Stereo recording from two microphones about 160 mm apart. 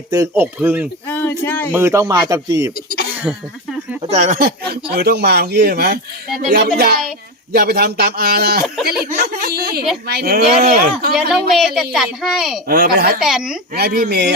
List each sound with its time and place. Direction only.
0.1 s speech: 15° right (ahead or behind)
1.0 s speech: 15° left (ahead or behind)
1.7 s speech: 15° right (ahead or behind)
3.3 s speech: 5° right (ahead or behind)
4.1 s speech: 50° right (ahead or behind); by 8.6 s 80° right
8.6 s speech: centre (ahead or behind)
8.9 s a woman's voice: 70° right (ahead or behind)
11.1 s speech: centre (ahead or behind)
12.6 s speech: 65° right (ahead or behind)
13.1 s speech: 5° right (ahead or behind)
13.7 s speech: 80° right